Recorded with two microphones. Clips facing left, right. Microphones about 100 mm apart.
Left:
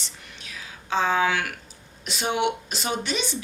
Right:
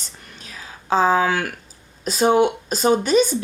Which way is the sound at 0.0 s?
40° right (ahead or behind).